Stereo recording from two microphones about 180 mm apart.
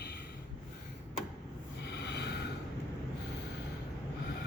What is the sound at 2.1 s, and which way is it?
Snort, 70° left (ahead or behind).